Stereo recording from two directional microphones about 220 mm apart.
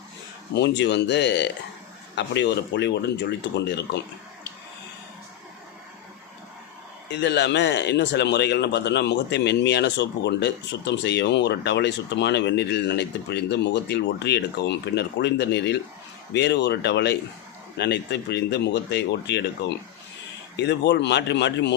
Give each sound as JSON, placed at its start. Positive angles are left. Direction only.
{"t": 0.5, "sound": "speech", "side_deg": 50}
{"t": 7.1, "sound": "speech", "side_deg": 50}
{"t": 20.6, "sound": "speech", "side_deg": 50}